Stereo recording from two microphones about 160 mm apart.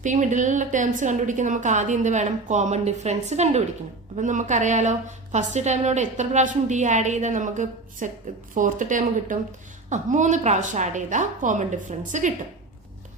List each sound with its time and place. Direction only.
0.0 s a woman's voice: 50° right (ahead or behind)